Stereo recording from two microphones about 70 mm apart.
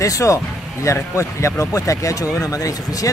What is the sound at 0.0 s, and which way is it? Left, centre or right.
Speech, left.